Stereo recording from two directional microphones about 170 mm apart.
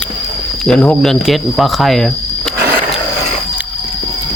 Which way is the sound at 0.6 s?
5° left (ahead or behind).